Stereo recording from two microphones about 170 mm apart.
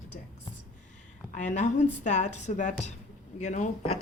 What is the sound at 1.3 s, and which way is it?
A woman's voice, 45° left (ahead or behind).